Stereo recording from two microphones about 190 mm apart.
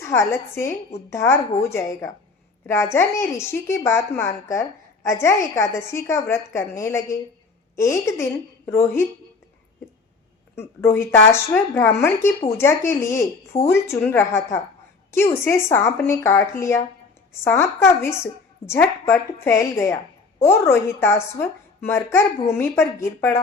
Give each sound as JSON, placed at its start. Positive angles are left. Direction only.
{"t": 0.0, "sound": "speech", "side_deg": 10}
{"t": 10.5, "sound": "speech", "side_deg": 15}